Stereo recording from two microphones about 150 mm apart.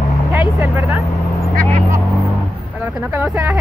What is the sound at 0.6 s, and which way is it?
Speech, 15° right (ahead or behind).